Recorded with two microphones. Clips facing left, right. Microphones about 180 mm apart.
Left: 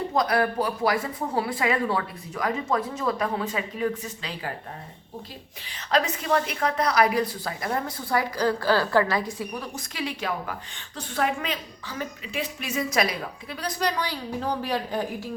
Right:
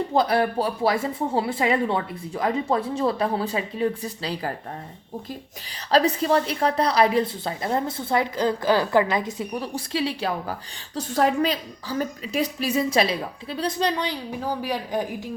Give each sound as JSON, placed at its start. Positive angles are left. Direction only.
{"t": 0.1, "sound": "a woman's voice", "side_deg": -30}
{"t": 5.9, "sound": "a woman's voice", "side_deg": -35}